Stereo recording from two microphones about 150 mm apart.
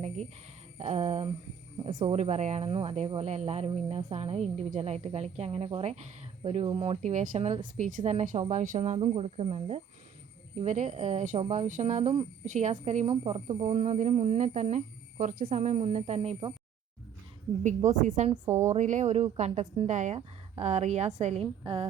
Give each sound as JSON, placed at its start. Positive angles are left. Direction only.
{"t": 0.8, "sound": "speech", "side_deg": -45}
{"t": 1.8, "sound": "speech", "side_deg": -30}
{"t": 2.1, "sound": "speech", "side_deg": -50}
{"t": 17.8, "sound": "a woman's voice", "side_deg": -55}
{"t": 18.4, "sound": "a woman's voice", "side_deg": -15}
{"t": 18.7, "sound": "speech", "side_deg": -55}
{"t": 21.6, "sound": "speech", "side_deg": -35}